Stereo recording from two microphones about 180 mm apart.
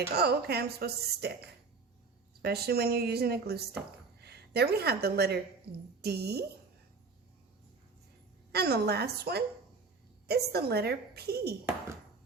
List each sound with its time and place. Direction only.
0.1 s a woman's voice: 60° right (ahead or behind)
8.5 s a woman's voice: 65° right (ahead or behind)